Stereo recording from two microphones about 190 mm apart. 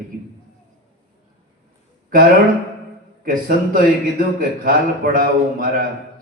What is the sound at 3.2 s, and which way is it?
A man's voice, 45° right (ahead or behind).